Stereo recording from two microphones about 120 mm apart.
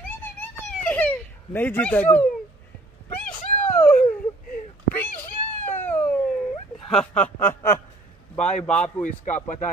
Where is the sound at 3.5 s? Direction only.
70° left (ahead or behind).